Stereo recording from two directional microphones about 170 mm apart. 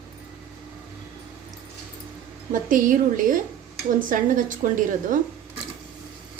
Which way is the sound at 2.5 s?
50° right (ahead or behind).